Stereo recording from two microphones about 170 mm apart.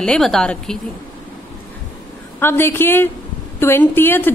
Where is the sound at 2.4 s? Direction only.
15° left (ahead or behind).